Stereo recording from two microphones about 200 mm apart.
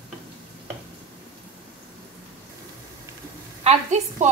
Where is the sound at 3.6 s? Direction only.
35° right (ahead or behind).